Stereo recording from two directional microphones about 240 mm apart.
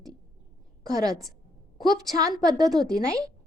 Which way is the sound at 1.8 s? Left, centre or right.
Centre.